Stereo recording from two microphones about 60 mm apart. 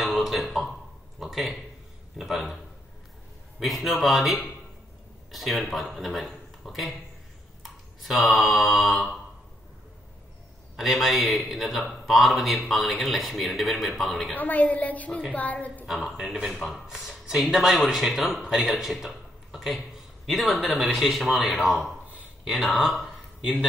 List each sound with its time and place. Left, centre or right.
0.0 s a sound: centre
1.2 s speech: centre
7.6 s mantra: centre
10.8 s speech: centre
14.3 s a woman's voice: left
15.9 s speech: centre
19.5 s a sound: centre
20.2 s speech: centre